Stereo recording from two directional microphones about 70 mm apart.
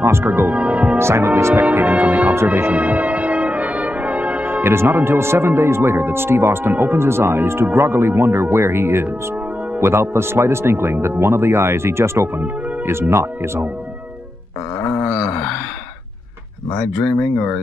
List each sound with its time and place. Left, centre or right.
0.0 s speech: right; by 0.9 s centre
0.9 s speech: right; by 2.3 s centre
2.4 s brass instrument: right
7.7 s speech: right